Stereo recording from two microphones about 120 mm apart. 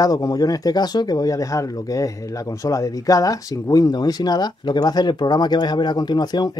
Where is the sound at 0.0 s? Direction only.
30° left (ahead or behind).